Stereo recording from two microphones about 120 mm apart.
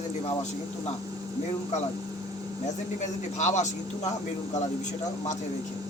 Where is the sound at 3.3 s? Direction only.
75° left (ahead or behind).